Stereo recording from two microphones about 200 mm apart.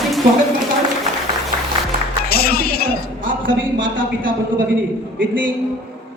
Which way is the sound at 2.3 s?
50° left (ahead or behind).